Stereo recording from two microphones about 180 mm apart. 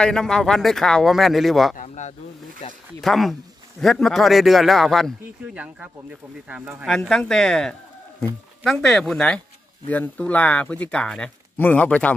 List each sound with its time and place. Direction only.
0.0 s a man's voice: 5° left (ahead or behind)
1.8 s a sound: 40° left (ahead or behind)
2.6 s speech: 35° left (ahead or behind)
3.0 s a man's voice: centre (ahead or behind)